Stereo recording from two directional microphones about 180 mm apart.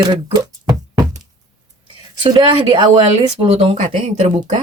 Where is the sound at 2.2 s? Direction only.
25° right (ahead or behind).